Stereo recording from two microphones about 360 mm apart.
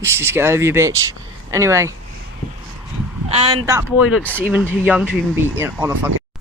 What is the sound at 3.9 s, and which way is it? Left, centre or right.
Speech, left.